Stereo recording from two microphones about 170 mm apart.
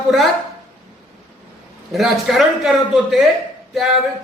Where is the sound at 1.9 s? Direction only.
Centre (ahead or behind).